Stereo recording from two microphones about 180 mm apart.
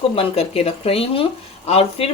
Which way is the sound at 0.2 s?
35° left (ahead or behind).